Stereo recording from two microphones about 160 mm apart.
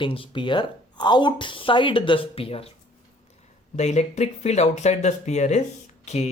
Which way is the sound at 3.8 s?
45° left (ahead or behind).